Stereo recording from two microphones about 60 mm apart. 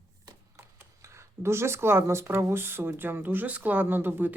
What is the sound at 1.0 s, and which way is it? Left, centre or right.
Speech, right.